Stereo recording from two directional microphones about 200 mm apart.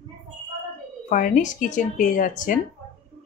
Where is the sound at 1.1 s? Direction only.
40° left (ahead or behind).